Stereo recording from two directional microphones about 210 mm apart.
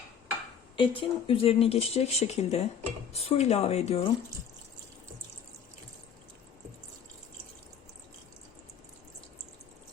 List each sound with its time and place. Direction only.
0.8 s speech: 25° left (ahead or behind)